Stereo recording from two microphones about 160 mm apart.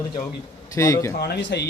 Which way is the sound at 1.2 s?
90° left.